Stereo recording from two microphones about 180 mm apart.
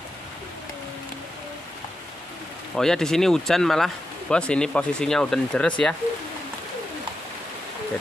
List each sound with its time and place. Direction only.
2.7 s speech: 5° left (ahead or behind)